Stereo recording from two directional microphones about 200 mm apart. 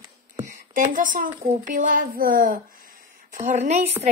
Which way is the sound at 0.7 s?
40° right (ahead or behind).